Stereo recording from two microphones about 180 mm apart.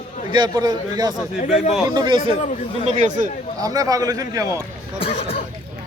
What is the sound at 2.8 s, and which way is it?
Speech, 40° right (ahead or behind).